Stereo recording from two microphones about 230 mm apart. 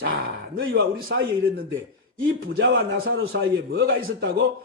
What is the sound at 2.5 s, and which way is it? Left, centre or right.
A man's voice, right.